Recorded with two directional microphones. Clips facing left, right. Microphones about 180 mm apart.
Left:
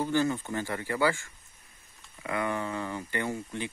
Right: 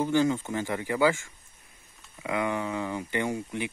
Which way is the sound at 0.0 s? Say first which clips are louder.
Right 3 dB; 15° right (ahead or behind).